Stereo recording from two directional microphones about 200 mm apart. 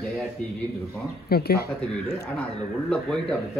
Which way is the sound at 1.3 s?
50° left (ahead or behind).